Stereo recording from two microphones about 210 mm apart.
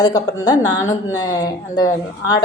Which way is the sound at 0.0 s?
20° left (ahead or behind).